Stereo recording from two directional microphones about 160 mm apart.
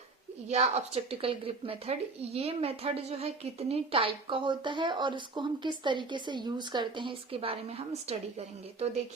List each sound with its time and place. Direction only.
0.4 s speech: 40° right (ahead or behind)